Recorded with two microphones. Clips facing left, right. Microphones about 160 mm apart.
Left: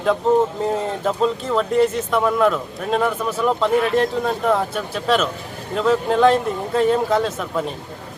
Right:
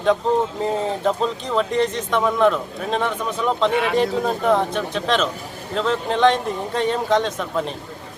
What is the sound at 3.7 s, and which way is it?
Speech, 90° right.